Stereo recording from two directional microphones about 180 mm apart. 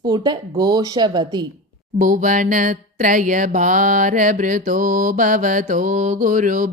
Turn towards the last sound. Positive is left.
turn(degrees=-45)  # may be behind; listen again after turning